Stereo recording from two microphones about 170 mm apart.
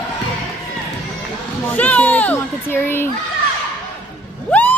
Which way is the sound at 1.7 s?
10° left (ahead or behind).